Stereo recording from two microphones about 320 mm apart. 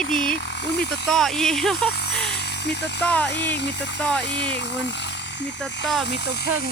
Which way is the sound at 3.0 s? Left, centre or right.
Centre.